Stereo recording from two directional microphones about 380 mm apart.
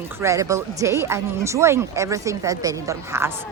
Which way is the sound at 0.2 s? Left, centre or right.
Centre.